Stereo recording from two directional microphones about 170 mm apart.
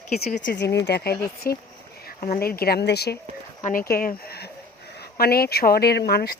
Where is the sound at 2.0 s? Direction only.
55° left (ahead or behind).